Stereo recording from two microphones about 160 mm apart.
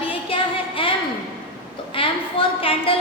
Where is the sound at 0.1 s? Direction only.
35° left (ahead or behind).